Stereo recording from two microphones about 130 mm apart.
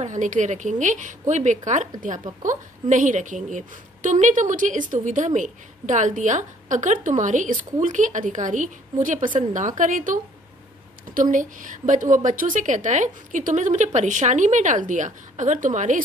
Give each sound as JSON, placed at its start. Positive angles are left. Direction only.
{"t": 0.0, "sound": "a woman's voice", "side_deg": -70}